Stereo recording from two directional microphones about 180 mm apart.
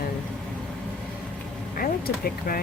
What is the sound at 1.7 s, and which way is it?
Speech, 55° left (ahead or behind).